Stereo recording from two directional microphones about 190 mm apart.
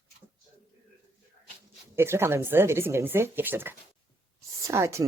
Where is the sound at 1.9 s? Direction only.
15° right (ahead or behind).